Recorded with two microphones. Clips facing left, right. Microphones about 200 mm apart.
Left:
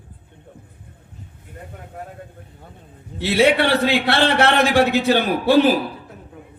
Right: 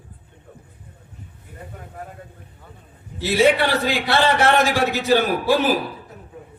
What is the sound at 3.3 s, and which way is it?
A man's voice, 60° left (ahead or behind).